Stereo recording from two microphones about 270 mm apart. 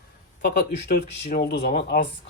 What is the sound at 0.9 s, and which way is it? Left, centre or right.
Speech, left.